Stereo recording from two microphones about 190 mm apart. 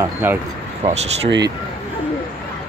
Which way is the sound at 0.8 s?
35° right (ahead or behind).